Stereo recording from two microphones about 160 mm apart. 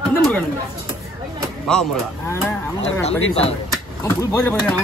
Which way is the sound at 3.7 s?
20° left (ahead or behind).